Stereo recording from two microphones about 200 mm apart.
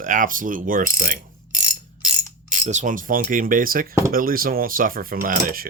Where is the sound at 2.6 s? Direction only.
40° right (ahead or behind).